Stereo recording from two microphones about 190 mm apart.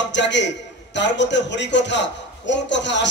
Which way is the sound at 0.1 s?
70° left (ahead or behind).